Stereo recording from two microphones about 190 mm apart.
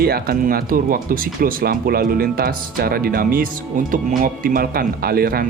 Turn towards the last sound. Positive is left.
turn(degrees=-50)  # may be behind; listen again after turning